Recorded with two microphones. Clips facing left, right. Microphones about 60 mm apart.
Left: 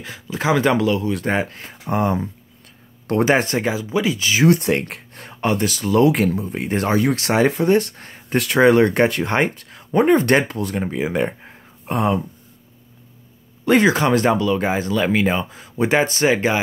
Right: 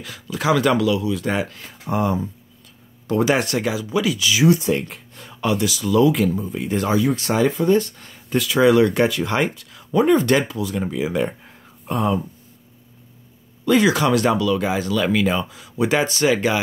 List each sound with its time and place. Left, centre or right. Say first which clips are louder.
0.0 s speech: even; left
3.3 s speech: left 4 dB; left
4.5 s speech: left 1 dB; left
10.8 s speech: left 1 dB; left
11.9 s speech: left 1 dB; left
13.8 s speech: left 1 dB; left